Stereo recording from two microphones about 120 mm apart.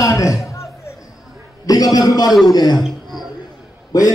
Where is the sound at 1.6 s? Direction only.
30° left (ahead or behind).